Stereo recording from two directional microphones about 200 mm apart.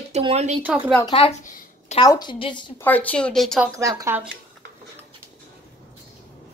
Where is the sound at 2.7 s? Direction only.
10° left (ahead or behind).